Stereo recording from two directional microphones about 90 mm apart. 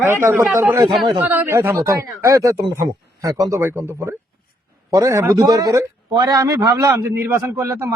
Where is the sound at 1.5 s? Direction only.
30° right (ahead or behind); by 6.9 s 45° right (ahead or behind).